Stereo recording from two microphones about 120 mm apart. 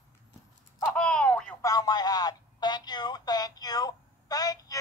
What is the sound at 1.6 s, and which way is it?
Telephone, 35° left (ahead or behind).